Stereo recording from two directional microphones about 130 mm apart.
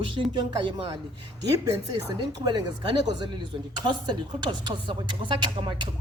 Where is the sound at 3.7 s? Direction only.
35° right (ahead or behind).